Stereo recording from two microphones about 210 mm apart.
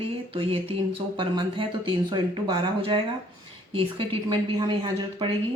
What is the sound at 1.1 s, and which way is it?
Speech, 20° right (ahead or behind).